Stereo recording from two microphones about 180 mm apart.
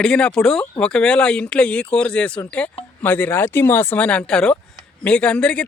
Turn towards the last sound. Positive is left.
turn(degrees=5)  # may be behind; listen again after turning